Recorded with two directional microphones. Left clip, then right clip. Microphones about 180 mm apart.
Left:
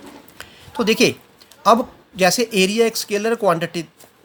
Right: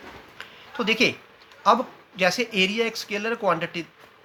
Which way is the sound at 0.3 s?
50° left (ahead or behind).